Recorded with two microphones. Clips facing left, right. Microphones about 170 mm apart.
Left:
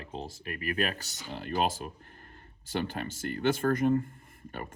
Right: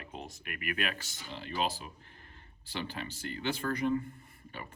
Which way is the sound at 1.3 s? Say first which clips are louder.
Left 5 dB; 50° left (ahead or behind).